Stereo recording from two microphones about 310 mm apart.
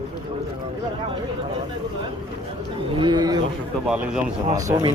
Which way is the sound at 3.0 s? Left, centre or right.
Centre.